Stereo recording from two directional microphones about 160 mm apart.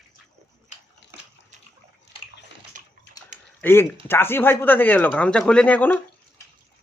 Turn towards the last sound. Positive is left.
turn(degrees=10)  # may be behind; listen again after turning